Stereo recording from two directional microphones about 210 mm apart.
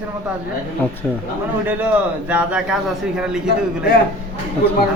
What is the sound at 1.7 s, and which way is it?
A man's voice, 5° right (ahead or behind).